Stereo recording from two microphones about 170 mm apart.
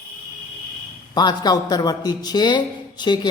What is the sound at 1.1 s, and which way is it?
A man's voice, 25° left (ahead or behind).